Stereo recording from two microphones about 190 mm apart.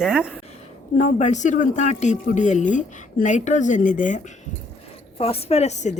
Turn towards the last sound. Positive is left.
turn(degrees=40)  # may be behind; listen again after turning